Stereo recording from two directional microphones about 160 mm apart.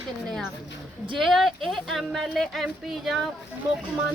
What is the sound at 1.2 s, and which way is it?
Speech, centre (ahead or behind).